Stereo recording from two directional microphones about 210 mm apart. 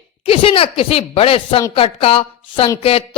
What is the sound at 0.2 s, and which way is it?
Speech, 25° left (ahead or behind).